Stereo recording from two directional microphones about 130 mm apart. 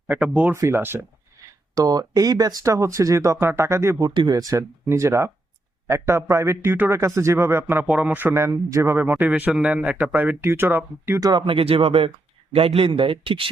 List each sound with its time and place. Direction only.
0.1 s a man's voice: 10° right (ahead or behind)
1.7 s speech: 30° right (ahead or behind)
4.1 s a man's voice: 35° right (ahead or behind); by 11.2 s 15° right (ahead or behind)
11.2 s a man's voice: 35° right (ahead or behind)